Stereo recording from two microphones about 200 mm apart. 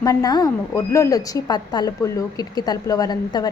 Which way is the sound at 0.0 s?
15° left (ahead or behind).